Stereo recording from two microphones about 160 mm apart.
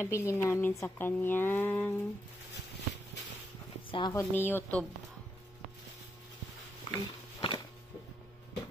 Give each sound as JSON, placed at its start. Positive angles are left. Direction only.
{"t": 0.0, "sound": "speech", "side_deg": 15}
{"t": 3.9, "sound": "speech", "side_deg": 25}
{"t": 6.8, "sound": "a sound", "side_deg": 30}